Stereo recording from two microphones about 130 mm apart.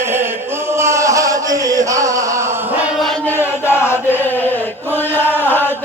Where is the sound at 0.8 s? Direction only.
20° right (ahead or behind).